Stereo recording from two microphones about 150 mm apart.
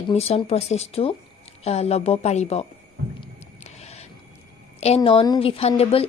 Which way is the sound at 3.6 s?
45° left (ahead or behind).